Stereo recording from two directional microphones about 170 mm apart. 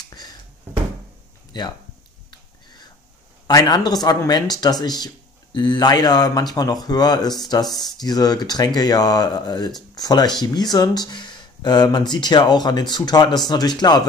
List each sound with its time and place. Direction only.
1.5 s speech: 25° left (ahead or behind)
2.3 s whispering: 25° left (ahead or behind)
3.4 s speech: 25° left (ahead or behind)